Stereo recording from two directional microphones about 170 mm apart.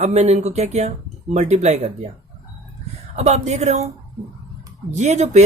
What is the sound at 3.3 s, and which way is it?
Speech, 40° right (ahead or behind).